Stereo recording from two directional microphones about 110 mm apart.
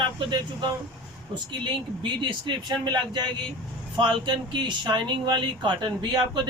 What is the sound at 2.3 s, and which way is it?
Speech, 45° right (ahead or behind).